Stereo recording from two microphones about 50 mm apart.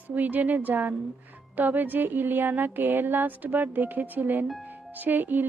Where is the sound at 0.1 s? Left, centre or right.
Right.